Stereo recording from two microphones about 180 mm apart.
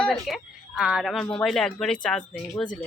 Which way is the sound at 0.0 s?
Centre (ahead or behind).